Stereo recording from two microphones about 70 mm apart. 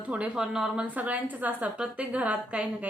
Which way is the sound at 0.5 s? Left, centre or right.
Centre.